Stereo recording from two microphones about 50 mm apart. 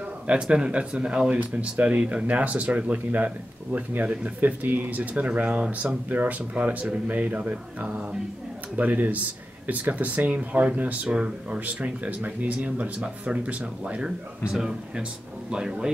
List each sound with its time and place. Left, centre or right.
0.3 s speech: centre
14.0 s speech: centre